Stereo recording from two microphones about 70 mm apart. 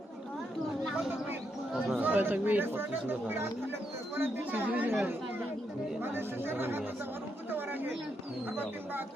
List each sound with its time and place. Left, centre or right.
2.0 s speech: right
6.0 s speech: right